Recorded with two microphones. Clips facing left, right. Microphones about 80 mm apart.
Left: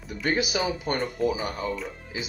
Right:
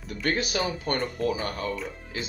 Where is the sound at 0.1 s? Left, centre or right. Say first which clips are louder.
Left 1 dB; centre.